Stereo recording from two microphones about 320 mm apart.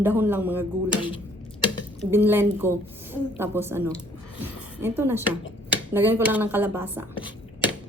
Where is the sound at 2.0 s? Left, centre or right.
Centre.